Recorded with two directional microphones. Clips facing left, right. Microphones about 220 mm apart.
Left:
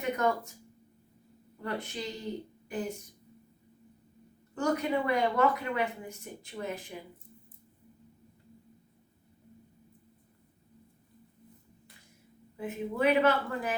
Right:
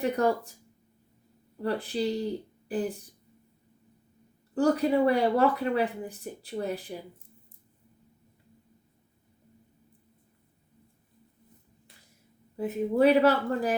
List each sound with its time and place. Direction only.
0.0 s speech: 35° right (ahead or behind)
1.6 s speech: 35° right (ahead or behind)
4.5 s speech: 35° right (ahead or behind)
12.5 s speech: 35° right (ahead or behind)